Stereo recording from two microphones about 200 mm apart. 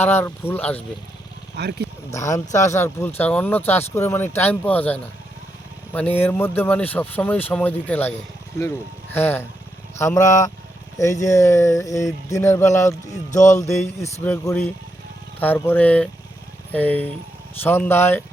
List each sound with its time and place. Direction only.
0.0 s speech: 10° left (ahead or behind)
1.5 s speech: 55° right (ahead or behind)
2.1 s speech: 15° left (ahead or behind)
9.1 s speech: 10° left (ahead or behind)